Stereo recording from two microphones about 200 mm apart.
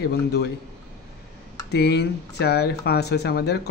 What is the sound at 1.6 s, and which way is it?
Speech, 55° left (ahead or behind).